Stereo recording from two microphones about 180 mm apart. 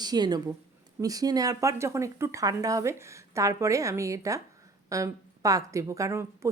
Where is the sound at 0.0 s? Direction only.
20° right (ahead or behind).